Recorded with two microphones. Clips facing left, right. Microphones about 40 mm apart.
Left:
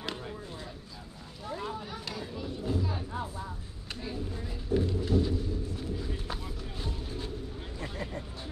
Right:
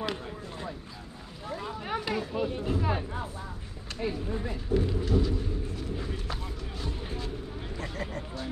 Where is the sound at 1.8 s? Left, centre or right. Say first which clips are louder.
Right 8 dB; right.